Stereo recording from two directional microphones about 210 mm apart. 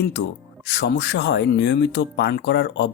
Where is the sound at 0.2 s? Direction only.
55° left (ahead or behind).